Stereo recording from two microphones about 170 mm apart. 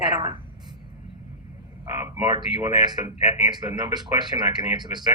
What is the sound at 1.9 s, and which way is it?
Speech, 15° right (ahead or behind).